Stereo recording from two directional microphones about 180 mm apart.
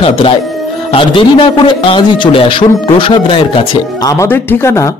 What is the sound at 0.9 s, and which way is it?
Speech, 30° left (ahead or behind).